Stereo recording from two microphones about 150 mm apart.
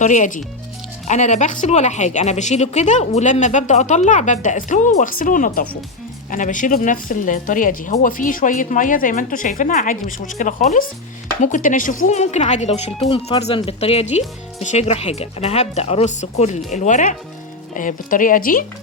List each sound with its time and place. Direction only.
0.0 s a woman's voice: 55° left (ahead or behind)